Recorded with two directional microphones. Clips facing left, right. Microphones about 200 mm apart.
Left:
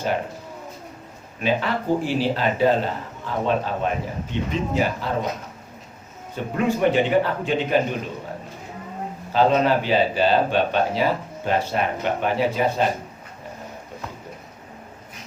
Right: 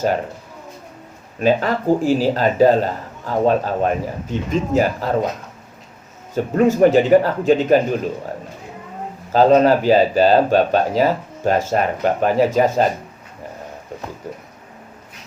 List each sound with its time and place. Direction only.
1.4 s a man's voice: 40° right (ahead or behind)
6.3 s a man's voice: 45° right (ahead or behind)
9.3 s a man's voice: 40° right (ahead or behind)